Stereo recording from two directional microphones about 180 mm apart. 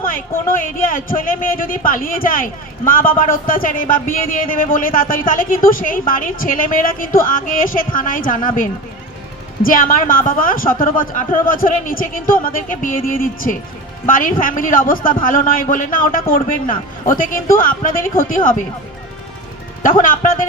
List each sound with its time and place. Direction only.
0.9 s a man's voice: 50° left (ahead or behind)
9.6 s a man's voice: 50° left (ahead or behind)
19.8 s a man's voice: 50° left (ahead or behind)